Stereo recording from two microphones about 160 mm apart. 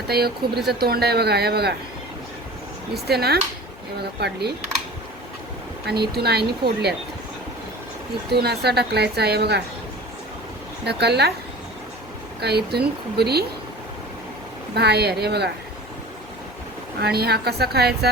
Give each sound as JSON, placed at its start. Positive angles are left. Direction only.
{"t": 0.1, "sound": "a woman's voice", "side_deg": -80}
{"t": 2.9, "sound": "a woman's voice", "side_deg": -80}
{"t": 5.8, "sound": "a woman's voice", "side_deg": -90}
{"t": 8.3, "sound": "a woman's voice", "side_deg": -90}
{"t": 10.8, "sound": "a woman's voice", "side_deg": -90}
{"t": 12.4, "sound": "a woman's voice", "side_deg": -90}
{"t": 14.8, "sound": "a woman's voice", "side_deg": -90}
{"t": 17.0, "sound": "a woman's voice", "side_deg": -85}